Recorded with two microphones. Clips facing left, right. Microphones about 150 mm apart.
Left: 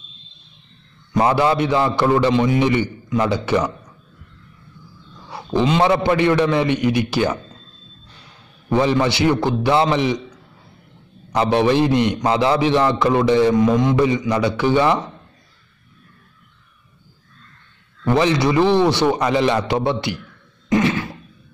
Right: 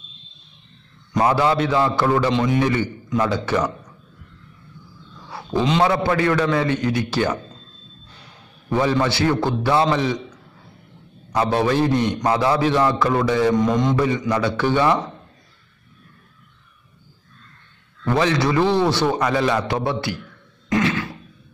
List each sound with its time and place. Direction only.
1.1 s a man's voice: 20° left (ahead or behind)
2.3 s mantra: 5° left (ahead or behind)
3.2 s a man's voice: 15° left (ahead or behind)
5.9 s a man's voice: 20° left (ahead or behind)
8.6 s a man's voice: 20° left (ahead or behind)
11.3 s a man's voice: 20° left (ahead or behind)
13.6 s mantra: 5° left (ahead or behind)
13.9 s a man's voice: 15° left (ahead or behind)
18.0 s a man's voice: 15° left (ahead or behind)
20.7 s a sound: 25° left (ahead or behind)